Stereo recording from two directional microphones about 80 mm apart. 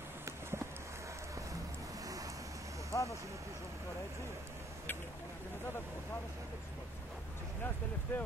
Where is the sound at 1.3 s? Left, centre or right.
Right.